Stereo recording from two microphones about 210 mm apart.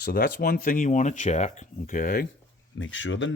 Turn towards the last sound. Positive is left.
turn(degrees=65)  # may be behind; listen again after turning